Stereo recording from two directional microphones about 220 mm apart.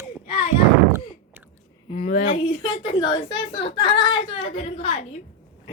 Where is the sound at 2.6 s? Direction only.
20° left (ahead or behind).